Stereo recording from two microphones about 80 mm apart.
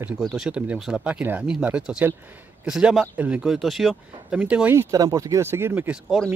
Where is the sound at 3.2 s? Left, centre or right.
Centre.